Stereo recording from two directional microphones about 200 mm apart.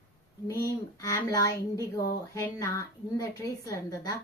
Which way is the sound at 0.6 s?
15° left (ahead or behind).